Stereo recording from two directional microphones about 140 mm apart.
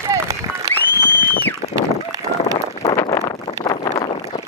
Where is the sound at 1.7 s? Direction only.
25° right (ahead or behind).